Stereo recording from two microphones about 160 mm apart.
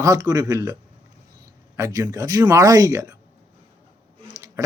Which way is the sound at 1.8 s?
20° right (ahead or behind).